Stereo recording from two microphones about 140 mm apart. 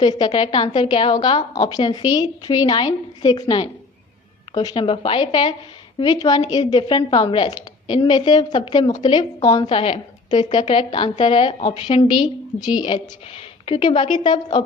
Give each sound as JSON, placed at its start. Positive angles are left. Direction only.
{"t": 0.0, "sound": "a woman's voice", "side_deg": 30}
{"t": 9.6, "sound": "a woman's voice", "side_deg": 40}